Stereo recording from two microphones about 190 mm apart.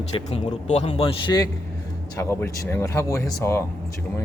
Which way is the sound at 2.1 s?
15° left (ahead or behind).